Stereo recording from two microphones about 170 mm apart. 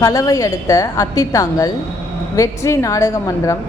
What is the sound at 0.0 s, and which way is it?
A woman's voice, 20° left (ahead or behind).